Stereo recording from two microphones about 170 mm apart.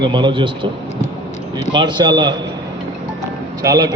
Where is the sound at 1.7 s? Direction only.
25° right (ahead or behind).